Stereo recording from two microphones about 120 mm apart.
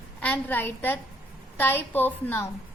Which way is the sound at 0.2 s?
15° left (ahead or behind).